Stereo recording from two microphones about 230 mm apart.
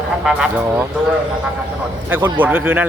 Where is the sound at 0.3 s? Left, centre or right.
Centre.